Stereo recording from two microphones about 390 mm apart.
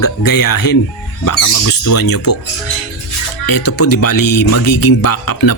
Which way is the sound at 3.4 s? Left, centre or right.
Left.